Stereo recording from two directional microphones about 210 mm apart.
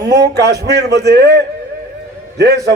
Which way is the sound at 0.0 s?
55° right (ahead or behind).